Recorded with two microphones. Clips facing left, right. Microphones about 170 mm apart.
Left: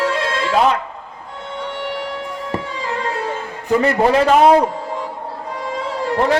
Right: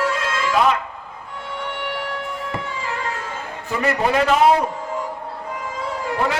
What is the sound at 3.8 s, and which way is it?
Speech, 35° left (ahead or behind).